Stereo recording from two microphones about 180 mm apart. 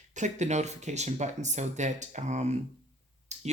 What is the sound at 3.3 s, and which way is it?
Clicking, 40° right (ahead or behind).